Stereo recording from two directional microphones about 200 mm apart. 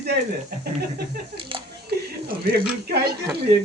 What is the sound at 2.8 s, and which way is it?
Speech, 50° right (ahead or behind).